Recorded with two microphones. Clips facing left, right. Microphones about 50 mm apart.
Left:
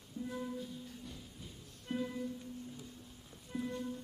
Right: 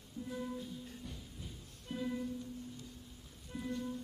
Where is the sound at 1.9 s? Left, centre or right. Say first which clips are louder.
Left 3 dB; centre.